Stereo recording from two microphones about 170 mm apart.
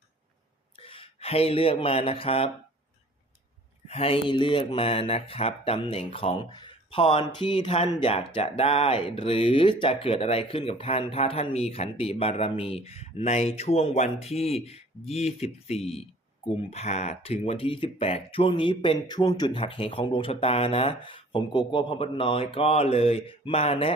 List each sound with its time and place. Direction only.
0.8 s speech: 30° left (ahead or behind)
3.8 s speech: 35° left (ahead or behind)